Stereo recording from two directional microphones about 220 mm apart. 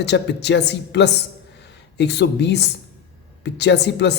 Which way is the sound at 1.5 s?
50° left (ahead or behind).